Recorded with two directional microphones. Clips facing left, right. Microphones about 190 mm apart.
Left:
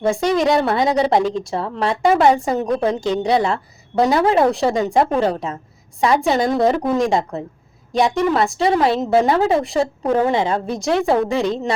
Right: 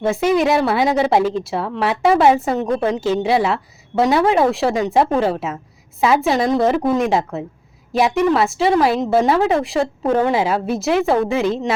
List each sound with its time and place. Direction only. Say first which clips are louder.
0.0 s a woman's voice: right 1 dB; 5° right (ahead or behind)